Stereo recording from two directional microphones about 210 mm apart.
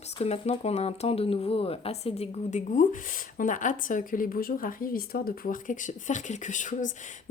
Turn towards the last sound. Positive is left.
turn(degrees=35)  # may be behind; listen again after turning